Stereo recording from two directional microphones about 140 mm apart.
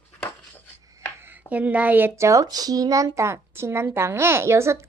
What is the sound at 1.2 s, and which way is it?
A child's voice, 10° right (ahead or behind).